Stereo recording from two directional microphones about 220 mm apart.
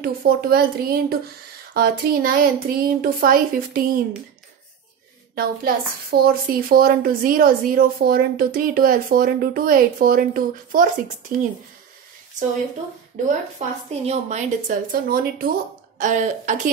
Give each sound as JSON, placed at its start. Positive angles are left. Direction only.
{"t": 0.0, "sound": "a woman's voice", "side_deg": -45}
{"t": 5.3, "sound": "a woman's voice", "side_deg": -45}
{"t": 13.3, "sound": "a woman's voice", "side_deg": -30}